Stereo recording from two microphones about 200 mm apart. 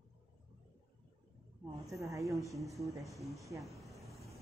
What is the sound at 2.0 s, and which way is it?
Speech, 15° right (ahead or behind).